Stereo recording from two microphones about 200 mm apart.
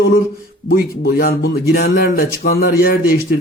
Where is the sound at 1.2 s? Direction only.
50° left (ahead or behind).